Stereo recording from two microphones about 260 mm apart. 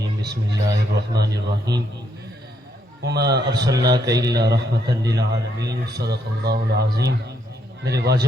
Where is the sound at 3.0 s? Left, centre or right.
Right.